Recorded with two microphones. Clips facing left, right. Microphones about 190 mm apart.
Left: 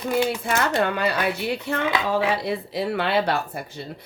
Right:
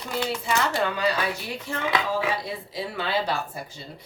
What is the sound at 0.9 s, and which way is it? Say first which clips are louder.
Speech: left 2 dB; 60° left (ahead or behind).